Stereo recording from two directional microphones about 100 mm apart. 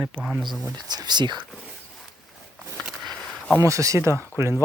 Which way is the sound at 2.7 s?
Centre (ahead or behind).